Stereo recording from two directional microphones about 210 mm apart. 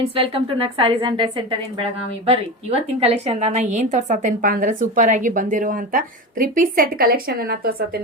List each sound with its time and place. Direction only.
0.1 s a woman's voice: 25° right (ahead or behind); by 8.0 s 45° right (ahead or behind)